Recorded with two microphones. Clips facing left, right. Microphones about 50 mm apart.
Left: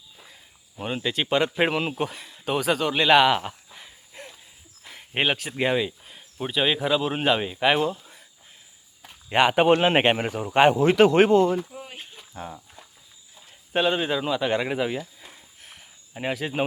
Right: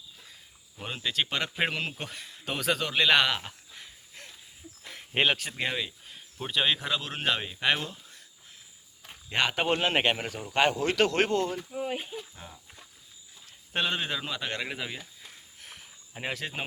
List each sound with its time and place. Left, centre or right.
0.8 s speech: centre
9.3 s speech: centre
11.7 s a sound: centre
12.4 s speech: centre
13.7 s speech: centre
15.6 s a sound: centre